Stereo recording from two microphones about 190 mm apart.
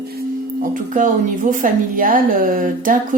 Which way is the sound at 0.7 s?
45° right (ahead or behind).